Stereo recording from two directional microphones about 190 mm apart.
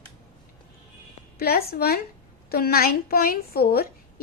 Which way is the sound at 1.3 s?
55° left (ahead or behind).